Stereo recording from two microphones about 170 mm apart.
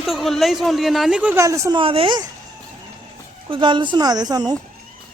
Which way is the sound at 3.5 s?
30° right (ahead or behind).